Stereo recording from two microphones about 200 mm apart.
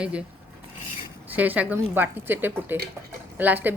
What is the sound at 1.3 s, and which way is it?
A woman's voice, 10° right (ahead or behind).